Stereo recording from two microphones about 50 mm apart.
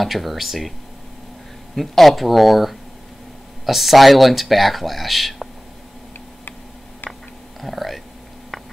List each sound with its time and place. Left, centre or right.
0.0 s speech: centre
1.8 s speech: centre
7.6 s a sound: centre